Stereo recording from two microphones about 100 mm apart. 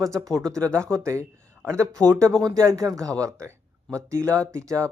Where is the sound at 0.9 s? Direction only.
30° right (ahead or behind).